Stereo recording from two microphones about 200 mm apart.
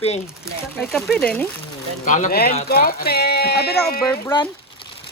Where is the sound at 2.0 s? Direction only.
40° left (ahead or behind).